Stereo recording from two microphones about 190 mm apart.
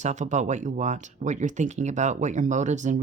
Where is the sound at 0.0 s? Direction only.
40° right (ahead or behind).